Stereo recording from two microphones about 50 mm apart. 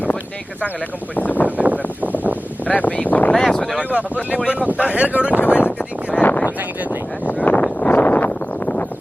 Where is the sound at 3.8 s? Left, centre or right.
Right.